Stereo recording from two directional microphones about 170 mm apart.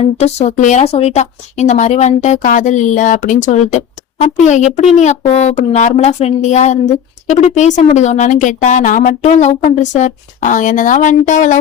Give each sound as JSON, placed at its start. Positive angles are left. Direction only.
{"t": 0.0, "sound": "speech", "side_deg": 40}